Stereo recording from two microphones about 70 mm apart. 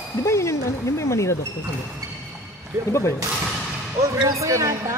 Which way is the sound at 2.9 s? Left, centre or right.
Left.